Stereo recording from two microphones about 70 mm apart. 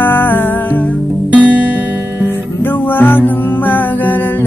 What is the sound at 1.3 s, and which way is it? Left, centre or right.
Music, right.